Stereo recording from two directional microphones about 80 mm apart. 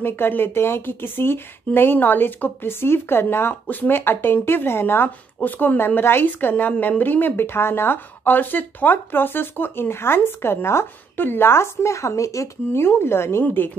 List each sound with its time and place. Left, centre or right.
0.0 s a woman's voice: left